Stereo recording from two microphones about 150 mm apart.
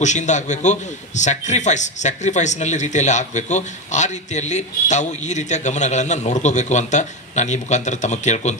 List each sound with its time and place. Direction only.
0.0 s a man's voice: 50° left (ahead or behind)